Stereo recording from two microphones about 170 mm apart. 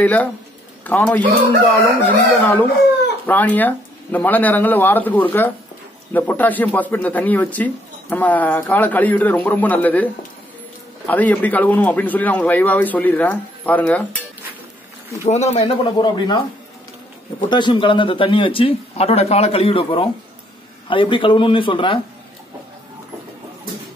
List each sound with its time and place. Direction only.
0.0 s speech: 10° left (ahead or behind)
11.1 s speech: 10° left (ahead or behind)
15.2 s speech: 40° left (ahead or behind)
15.6 s speech: 25° left (ahead or behind)
17.5 s speech: 25° left (ahead or behind)